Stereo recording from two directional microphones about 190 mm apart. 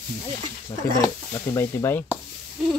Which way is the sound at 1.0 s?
15° left (ahead or behind).